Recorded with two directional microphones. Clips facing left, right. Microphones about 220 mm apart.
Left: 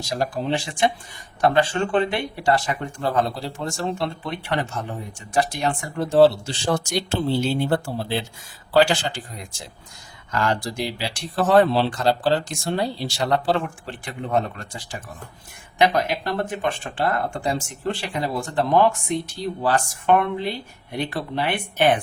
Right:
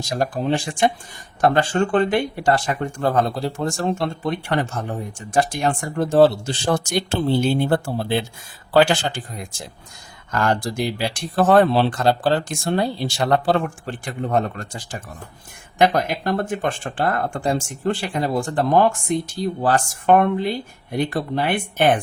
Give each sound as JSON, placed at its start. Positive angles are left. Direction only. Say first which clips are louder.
{"t": 0.2, "sound": "speech", "louder": "right 3 dB", "side_deg": -50}